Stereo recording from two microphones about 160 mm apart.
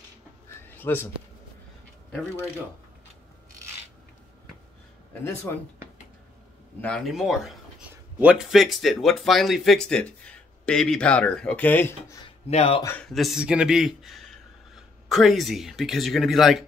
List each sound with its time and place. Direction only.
0.7 s speech: 10° left (ahead or behind)
5.2 s speech: 15° left (ahead or behind)
6.8 s speech: 5° left (ahead or behind)
12.4 s speech: 40° left (ahead or behind)
12.8 s speech: 5° left (ahead or behind)